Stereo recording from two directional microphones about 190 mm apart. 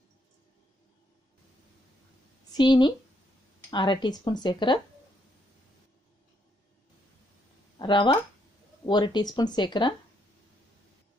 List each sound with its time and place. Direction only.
2.5 s speech: 20° left (ahead or behind)
7.8 s speech: 25° left (ahead or behind)